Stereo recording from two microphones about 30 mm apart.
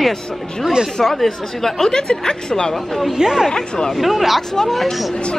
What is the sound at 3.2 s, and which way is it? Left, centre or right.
Speech, centre.